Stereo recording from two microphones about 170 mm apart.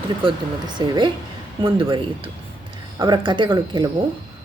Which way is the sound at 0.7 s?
25° right (ahead or behind).